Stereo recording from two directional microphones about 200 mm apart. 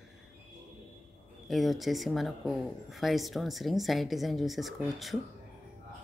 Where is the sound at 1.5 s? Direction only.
Centre (ahead or behind).